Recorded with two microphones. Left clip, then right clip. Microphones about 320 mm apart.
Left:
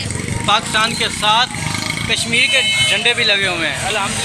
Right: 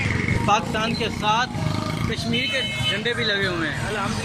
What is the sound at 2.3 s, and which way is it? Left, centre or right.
Speech, left.